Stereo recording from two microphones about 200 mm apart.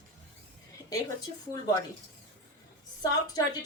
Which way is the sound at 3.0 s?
20° left (ahead or behind).